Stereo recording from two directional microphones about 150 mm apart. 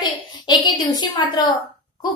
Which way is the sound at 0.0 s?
30° left (ahead or behind).